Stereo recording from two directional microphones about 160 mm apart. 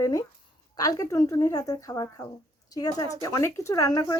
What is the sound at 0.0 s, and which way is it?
A woman's voice, 20° left (ahead or behind).